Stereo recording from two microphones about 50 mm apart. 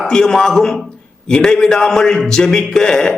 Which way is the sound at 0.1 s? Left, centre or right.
Centre.